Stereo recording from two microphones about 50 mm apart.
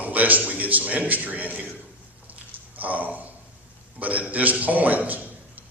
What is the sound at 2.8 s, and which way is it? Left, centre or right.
A man's voice, right.